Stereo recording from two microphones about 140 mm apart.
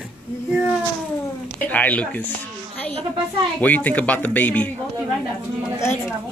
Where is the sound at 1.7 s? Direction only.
10° left (ahead or behind).